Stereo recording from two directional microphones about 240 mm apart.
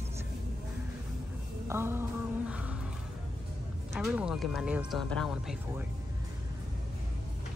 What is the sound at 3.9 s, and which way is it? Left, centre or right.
Speech, centre.